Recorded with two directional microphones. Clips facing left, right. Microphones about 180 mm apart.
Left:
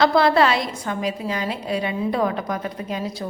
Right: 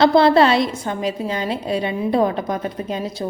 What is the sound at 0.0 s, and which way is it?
A woman's voice, 25° right (ahead or behind).